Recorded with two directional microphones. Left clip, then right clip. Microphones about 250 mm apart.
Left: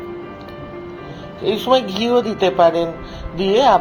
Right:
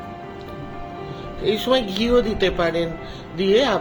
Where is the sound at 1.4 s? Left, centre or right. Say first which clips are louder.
Left 4 dB; right.